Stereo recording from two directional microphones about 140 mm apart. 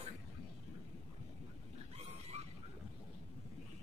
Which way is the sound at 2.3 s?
50° right (ahead or behind).